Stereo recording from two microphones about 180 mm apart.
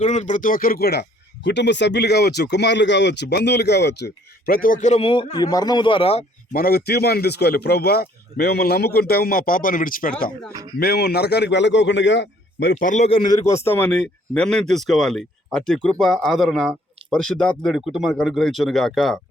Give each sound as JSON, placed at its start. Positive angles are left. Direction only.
{"t": 0.0, "sound": "speech", "side_deg": 40}
{"t": 1.5, "sound": "speech", "side_deg": 75}
{"t": 6.5, "sound": "a man's voice", "side_deg": 55}
{"t": 10.5, "sound": "speech", "side_deg": -20}
{"t": 10.8, "sound": "speech", "side_deg": 60}
{"t": 12.7, "sound": "speech", "side_deg": 45}